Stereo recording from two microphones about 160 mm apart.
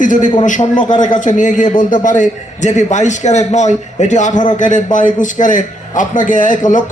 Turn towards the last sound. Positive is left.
turn(degrees=55)  # may be behind; listen again after turning